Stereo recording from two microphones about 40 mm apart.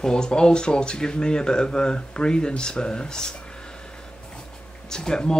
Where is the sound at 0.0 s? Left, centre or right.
Left.